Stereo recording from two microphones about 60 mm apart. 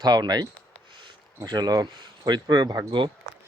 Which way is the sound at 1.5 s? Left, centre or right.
Right.